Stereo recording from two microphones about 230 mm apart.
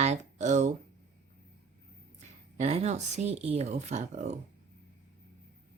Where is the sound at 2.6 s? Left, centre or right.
Right.